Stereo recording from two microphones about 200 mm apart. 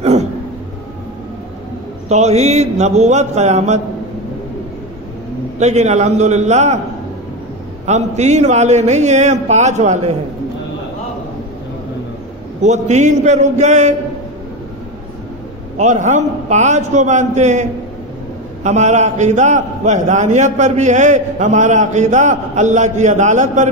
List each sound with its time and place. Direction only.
0.0 s a sound: 35° right (ahead or behind)
2.0 s a man's voice: 35° right (ahead or behind)
5.6 s a man's voice: 35° right (ahead or behind)
7.8 s a man's voice: 35° right (ahead or behind)
12.6 s a man's voice: 35° right (ahead or behind)
15.8 s a man's voice: 35° right (ahead or behind)